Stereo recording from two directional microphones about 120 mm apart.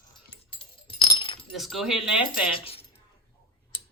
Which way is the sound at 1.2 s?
45° left (ahead or behind).